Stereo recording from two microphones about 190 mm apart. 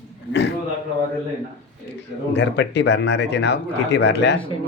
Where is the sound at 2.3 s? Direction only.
65° left (ahead or behind).